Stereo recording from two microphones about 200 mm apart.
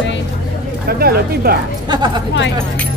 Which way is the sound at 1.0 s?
50° right (ahead or behind).